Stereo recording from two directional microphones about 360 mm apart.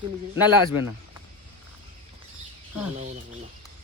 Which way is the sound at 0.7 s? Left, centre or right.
Left.